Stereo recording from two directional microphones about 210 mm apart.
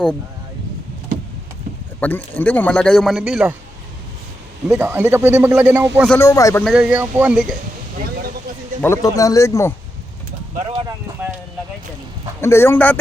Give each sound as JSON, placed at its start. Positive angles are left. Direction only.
{"t": 2.0, "sound": "a man's voice", "side_deg": 10}
{"t": 4.7, "sound": "a man's voice", "side_deg": -5}
{"t": 6.1, "sound": "speech", "side_deg": 15}
{"t": 6.7, "sound": "a man's voice", "side_deg": -5}
{"t": 8.8, "sound": "speech", "side_deg": 15}
{"t": 10.7, "sound": "clip-clop", "side_deg": -20}
{"t": 12.4, "sound": "speech", "side_deg": 10}